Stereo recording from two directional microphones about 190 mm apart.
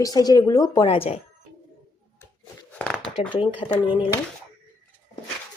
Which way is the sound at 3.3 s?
25° left (ahead or behind).